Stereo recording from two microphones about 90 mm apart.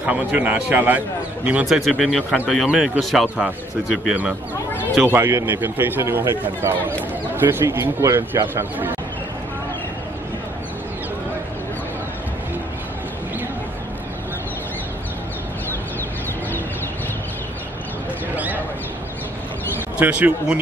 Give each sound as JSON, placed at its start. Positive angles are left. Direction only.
{"t": 0.0, "sound": "a man's voice", "side_deg": -15}
{"t": 1.7, "sound": "speech", "side_deg": 0}
{"t": 4.1, "sound": "a man's voice", "side_deg": -15}
{"t": 7.6, "sound": "speech", "side_deg": -35}
{"t": 18.3, "sound": "a sound", "side_deg": -20}
{"t": 20.0, "sound": "a man's voice", "side_deg": -15}